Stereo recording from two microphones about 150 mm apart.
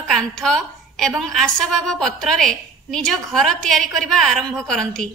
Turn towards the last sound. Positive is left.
turn(degrees=5)  # may be behind; listen again after turning